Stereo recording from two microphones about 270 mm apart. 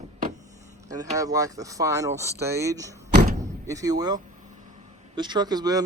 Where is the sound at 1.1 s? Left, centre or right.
Centre.